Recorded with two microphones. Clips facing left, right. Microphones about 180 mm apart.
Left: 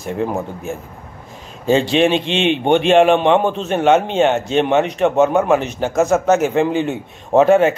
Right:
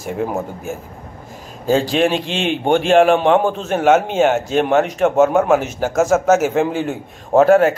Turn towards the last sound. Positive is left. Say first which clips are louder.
# even
turn(degrees=0)  # may be behind; listen again after turning